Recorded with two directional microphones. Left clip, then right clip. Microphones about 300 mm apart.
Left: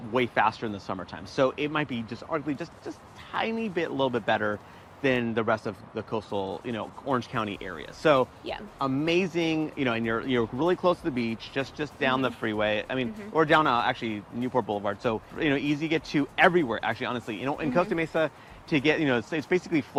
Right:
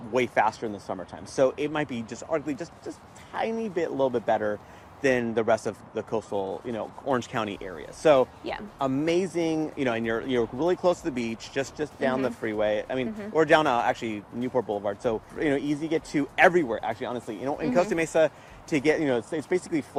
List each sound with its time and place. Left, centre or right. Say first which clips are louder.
0.1 s speech: right 1 dB; left
6.4 s speech: right 1 dB; left
7.1 s speech: right 1 dB; centre; by 17.8 s left
17.8 s speech: right 4 dB; centre